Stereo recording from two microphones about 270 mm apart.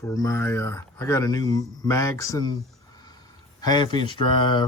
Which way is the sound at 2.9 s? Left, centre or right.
Centre.